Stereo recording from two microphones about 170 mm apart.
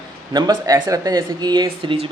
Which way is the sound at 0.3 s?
25° right (ahead or behind).